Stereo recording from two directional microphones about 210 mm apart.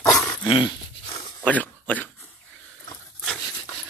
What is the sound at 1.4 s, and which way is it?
Speech, 5° left (ahead or behind).